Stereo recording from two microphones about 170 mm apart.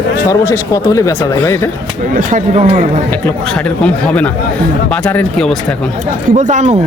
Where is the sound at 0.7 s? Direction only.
20° left (ahead or behind).